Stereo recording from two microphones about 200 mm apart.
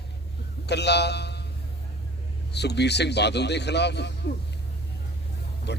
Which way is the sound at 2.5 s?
55° left (ahead or behind).